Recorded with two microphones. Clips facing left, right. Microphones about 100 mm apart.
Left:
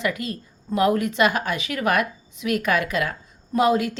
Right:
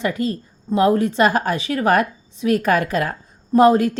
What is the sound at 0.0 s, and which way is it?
Speech, 35° right (ahead or behind).